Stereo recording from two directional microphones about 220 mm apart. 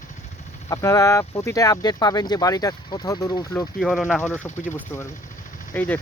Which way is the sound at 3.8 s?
Centre (ahead or behind).